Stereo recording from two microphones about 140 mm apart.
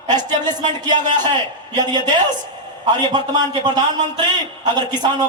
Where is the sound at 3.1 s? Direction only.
30° right (ahead or behind).